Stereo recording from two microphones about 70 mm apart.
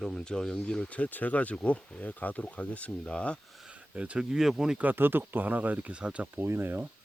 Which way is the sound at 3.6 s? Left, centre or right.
Centre.